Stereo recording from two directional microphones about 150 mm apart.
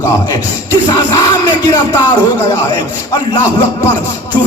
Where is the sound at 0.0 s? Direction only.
20° left (ahead or behind).